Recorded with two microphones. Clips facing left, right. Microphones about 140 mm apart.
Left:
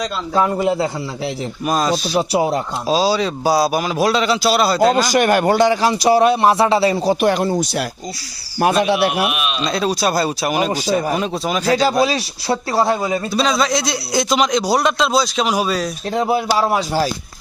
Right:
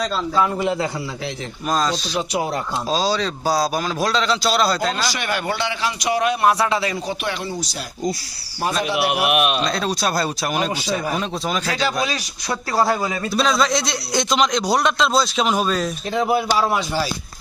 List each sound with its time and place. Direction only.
1.6 s a man's voice: 10° left (ahead or behind)
4.9 s a man's voice: 45° left (ahead or behind)
8.6 s speech: 65° left (ahead or behind)
9.3 s speech: 60° right (ahead or behind)
9.6 s a man's voice: 5° left (ahead or behind)
11.7 s a man's voice: 40° left (ahead or behind)
13.3 s a man's voice: centre (ahead or behind)
16.1 s a man's voice: 30° left (ahead or behind)